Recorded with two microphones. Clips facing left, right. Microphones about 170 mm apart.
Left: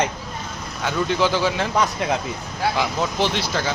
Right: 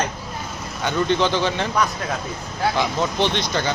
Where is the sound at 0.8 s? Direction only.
5° left (ahead or behind).